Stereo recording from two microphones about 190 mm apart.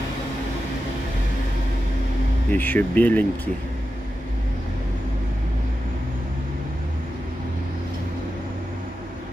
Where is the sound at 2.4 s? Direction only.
10° left (ahead or behind).